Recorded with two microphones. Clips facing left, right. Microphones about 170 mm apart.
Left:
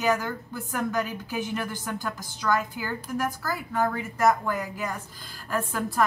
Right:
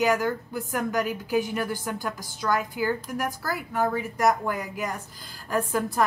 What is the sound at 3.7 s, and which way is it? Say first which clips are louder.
A woman's voice: right 1 dB; 10° right (ahead or behind).